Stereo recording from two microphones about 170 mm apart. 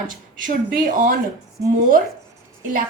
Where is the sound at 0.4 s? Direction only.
50° right (ahead or behind).